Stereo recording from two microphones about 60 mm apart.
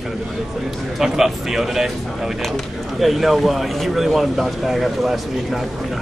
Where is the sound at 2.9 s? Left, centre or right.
Centre.